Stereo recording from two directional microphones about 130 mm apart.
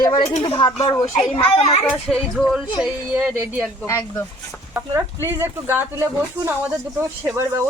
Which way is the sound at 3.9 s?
25° left (ahead or behind).